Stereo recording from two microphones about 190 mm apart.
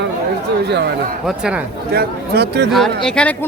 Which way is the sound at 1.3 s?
5° right (ahead or behind).